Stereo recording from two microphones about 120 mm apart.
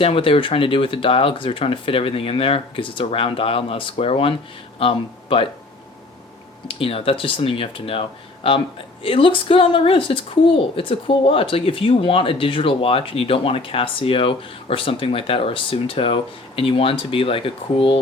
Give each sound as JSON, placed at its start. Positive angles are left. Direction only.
{"t": 0.0, "sound": "a woman's voice", "side_deg": 50}
{"t": 6.7, "sound": "a woman's voice", "side_deg": 50}
{"t": 9.0, "sound": "a woman's voice", "side_deg": 50}